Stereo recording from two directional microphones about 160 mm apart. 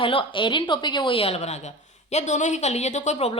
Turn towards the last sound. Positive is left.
turn(degrees=40)  # may be behind; listen again after turning